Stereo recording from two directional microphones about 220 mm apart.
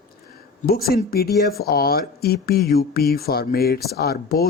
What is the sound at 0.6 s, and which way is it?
Speech, 45° left (ahead or behind).